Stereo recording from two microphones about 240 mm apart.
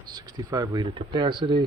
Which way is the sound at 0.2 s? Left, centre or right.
Centre.